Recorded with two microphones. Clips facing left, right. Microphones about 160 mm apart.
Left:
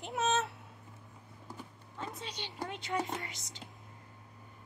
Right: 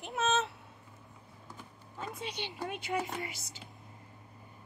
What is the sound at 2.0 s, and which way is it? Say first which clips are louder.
A woman's voice: right 3 dB; 10° right (ahead or behind).